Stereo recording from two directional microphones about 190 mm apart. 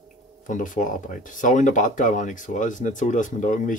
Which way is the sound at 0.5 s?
45° left (ahead or behind).